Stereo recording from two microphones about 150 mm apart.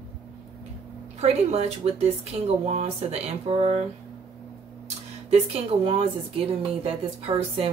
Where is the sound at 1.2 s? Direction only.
45° right (ahead or behind).